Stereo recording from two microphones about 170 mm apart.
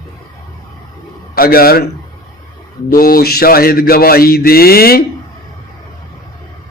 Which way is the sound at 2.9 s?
55° left (ahead or behind).